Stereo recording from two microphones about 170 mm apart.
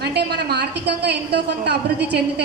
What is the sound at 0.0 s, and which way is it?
A woman's voice, 75° right (ahead or behind).